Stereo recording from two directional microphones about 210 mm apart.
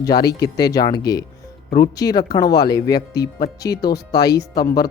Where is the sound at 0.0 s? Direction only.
20° left (ahead or behind).